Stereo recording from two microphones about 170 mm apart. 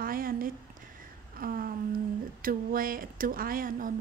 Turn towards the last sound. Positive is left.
turn(degrees=-55)  # may be behind; listen again after turning